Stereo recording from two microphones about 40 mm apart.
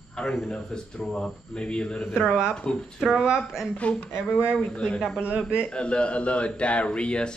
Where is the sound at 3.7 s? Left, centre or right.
Left.